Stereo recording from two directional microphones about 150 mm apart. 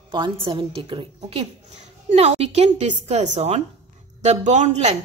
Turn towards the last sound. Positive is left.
turn(degrees=-50)  # may be behind; listen again after turning